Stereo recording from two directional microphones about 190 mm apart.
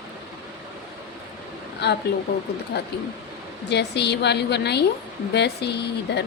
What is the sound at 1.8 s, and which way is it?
Speech, 60° left (ahead or behind).